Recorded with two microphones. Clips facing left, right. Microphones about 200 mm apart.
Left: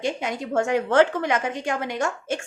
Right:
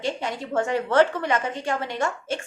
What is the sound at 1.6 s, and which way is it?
Speech, 45° left (ahead or behind).